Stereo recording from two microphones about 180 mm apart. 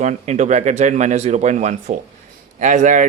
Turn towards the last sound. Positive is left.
turn(degrees=-40)  # may be behind; listen again after turning